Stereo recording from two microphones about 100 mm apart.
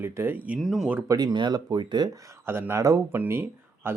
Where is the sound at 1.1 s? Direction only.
40° right (ahead or behind).